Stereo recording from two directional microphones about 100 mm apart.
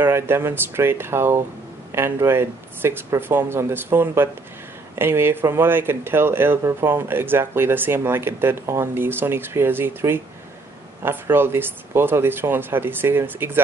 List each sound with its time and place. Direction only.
0.0 s speech: 25° right (ahead or behind)